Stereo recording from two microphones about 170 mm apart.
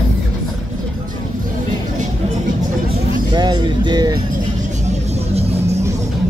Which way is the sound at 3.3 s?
25° right (ahead or behind).